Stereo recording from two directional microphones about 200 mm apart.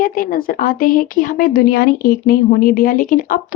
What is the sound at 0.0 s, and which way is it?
Speech, 45° left (ahead or behind).